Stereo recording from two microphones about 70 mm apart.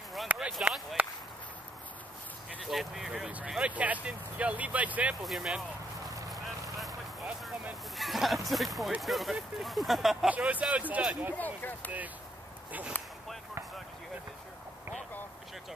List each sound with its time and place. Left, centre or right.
0.3 s a sound: right
1.0 s speech: right
2.6 s speech: centre
3.7 s speech: right
5.2 s speech: centre
8.0 s speech: centre
10.2 s speech: centre
11.3 s speech: left